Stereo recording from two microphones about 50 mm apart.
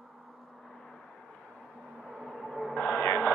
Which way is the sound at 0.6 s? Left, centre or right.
Centre.